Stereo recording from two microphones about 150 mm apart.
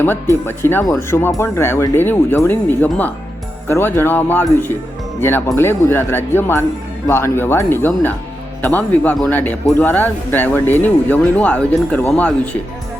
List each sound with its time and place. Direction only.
0.4 s a man's voice: 15° left (ahead or behind)